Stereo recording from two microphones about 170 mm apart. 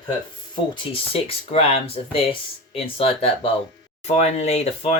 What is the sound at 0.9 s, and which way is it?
Speech, 35° left (ahead or behind).